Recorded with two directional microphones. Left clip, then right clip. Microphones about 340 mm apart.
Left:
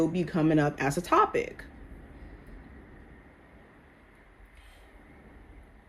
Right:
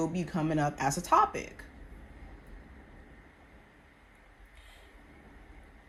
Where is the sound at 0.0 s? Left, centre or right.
Centre.